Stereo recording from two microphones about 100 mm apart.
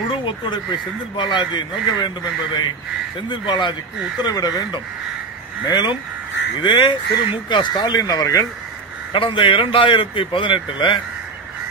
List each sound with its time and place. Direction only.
0.1 s speech: 55° left (ahead or behind); by 8.5 s 40° left (ahead or behind)
9.1 s a man's voice: 60° left (ahead or behind)